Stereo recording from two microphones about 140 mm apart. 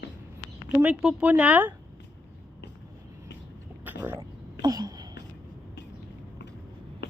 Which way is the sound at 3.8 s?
15° right (ahead or behind).